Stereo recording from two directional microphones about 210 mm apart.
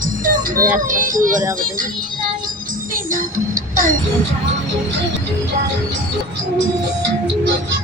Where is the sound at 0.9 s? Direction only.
40° right (ahead or behind).